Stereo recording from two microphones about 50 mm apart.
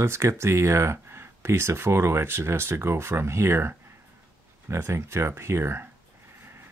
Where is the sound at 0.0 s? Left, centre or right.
Right.